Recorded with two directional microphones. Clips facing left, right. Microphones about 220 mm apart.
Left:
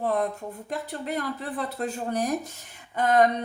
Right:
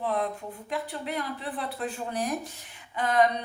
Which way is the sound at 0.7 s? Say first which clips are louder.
Left 1 dB; 45° left (ahead or behind).